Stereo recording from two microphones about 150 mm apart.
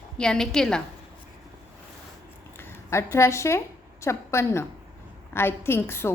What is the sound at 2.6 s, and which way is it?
A woman's voice, 15° left (ahead or behind).